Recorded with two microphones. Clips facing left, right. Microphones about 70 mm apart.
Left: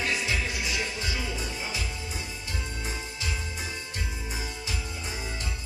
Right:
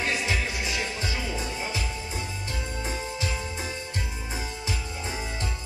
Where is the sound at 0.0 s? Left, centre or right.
Right.